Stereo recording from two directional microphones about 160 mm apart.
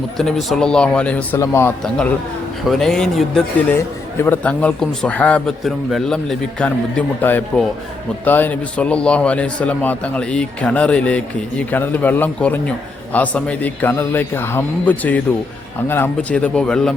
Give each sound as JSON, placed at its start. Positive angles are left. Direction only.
{"t": 0.2, "sound": "a man's voice", "side_deg": 0}
{"t": 1.8, "sound": "a man's voice", "side_deg": 5}